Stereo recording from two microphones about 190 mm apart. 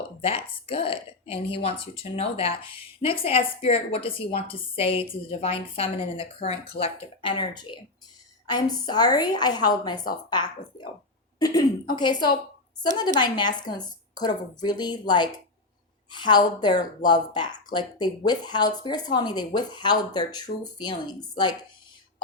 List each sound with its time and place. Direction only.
0.2 s speech: 30° left (ahead or behind)